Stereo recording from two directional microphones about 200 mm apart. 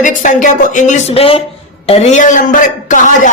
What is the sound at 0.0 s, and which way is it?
A man's voice, 40° left (ahead or behind).